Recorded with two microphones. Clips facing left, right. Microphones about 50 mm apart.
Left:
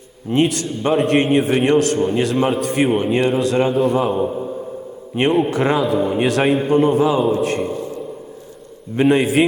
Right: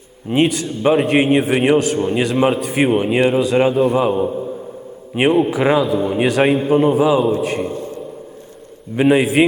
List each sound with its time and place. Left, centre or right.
0.3 s a man's voice: centre
5.3 s a man's voice: centre
7.7 s a sound: right
9.0 s a man's voice: centre